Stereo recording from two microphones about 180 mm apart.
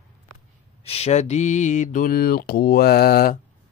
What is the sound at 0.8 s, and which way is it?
Speech, 35° left (ahead or behind).